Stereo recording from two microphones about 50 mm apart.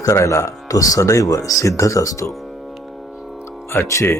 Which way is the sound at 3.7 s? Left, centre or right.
Left.